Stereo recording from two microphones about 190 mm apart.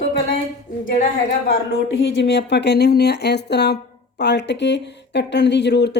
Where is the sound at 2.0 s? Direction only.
65° left (ahead or behind).